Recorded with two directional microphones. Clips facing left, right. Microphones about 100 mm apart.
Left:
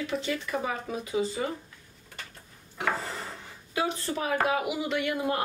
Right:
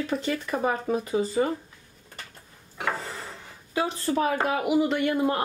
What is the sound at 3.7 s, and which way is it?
A woman's voice, 35° right (ahead or behind).